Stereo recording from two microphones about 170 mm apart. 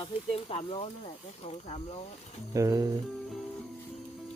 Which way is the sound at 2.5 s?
20° right (ahead or behind).